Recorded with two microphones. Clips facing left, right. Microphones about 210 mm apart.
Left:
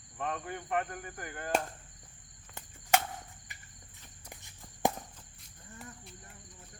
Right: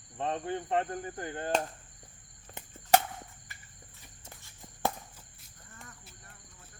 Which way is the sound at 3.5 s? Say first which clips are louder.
Right 1 dB; 15° left (ahead or behind).